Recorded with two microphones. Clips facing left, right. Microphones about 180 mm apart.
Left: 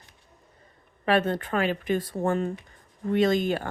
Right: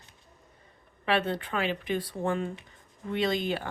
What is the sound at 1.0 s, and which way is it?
Speech, 45° left (ahead or behind).